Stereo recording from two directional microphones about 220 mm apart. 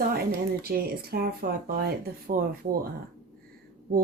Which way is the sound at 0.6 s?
45° right (ahead or behind).